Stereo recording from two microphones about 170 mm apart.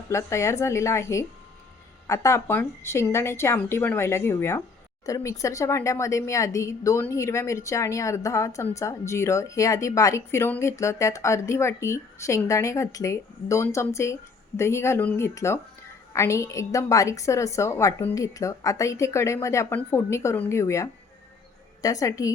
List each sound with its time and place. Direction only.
0.1 s a woman's voice: 15° left (ahead or behind)